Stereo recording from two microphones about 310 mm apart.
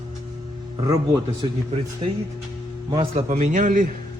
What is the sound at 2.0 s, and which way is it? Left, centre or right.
A man's voice, centre.